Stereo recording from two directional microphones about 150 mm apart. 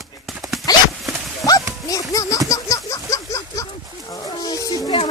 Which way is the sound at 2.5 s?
25° left (ahead or behind).